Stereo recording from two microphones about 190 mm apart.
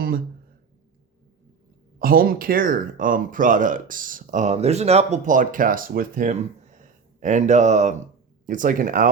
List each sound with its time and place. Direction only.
2.0 s speech: 50° right (ahead or behind)